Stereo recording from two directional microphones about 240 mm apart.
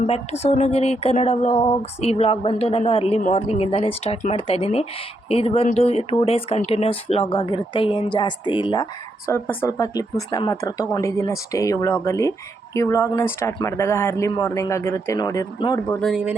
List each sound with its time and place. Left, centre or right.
0.0 s speech: left
16.0 s speech: centre